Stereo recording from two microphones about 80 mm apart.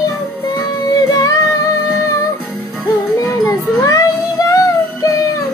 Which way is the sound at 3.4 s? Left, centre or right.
Left.